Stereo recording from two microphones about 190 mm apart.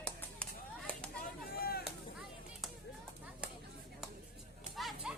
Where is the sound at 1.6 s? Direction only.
55° left (ahead or behind).